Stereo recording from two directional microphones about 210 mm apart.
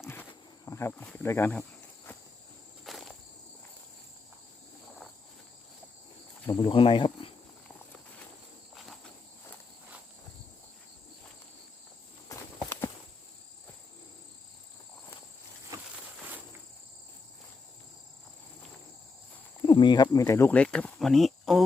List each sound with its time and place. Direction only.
0.0 s wild animals: 10° left (ahead or behind)
2.8 s insect: centre (ahead or behind)
6.5 s speech: 20° left (ahead or behind)
8.7 s cricket: centre (ahead or behind)
12.3 s walk: 15° left (ahead or behind)
19.6 s speech: 20° left (ahead or behind); by 21.6 s centre (ahead or behind)